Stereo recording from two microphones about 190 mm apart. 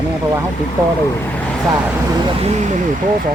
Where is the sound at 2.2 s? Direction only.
35° right (ahead or behind).